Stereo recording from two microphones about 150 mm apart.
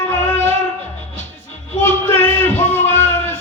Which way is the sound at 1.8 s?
15° left (ahead or behind).